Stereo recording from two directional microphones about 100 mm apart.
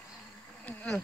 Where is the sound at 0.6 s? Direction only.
15° left (ahead or behind).